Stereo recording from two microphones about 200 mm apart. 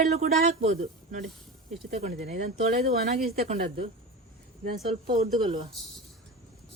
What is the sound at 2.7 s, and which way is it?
Speech, 50° right (ahead or behind).